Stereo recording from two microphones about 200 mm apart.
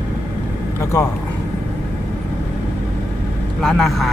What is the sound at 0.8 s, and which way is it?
Speech, 15° left (ahead or behind).